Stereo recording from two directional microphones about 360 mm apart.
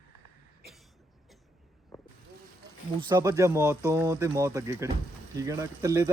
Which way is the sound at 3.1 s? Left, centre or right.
Centre.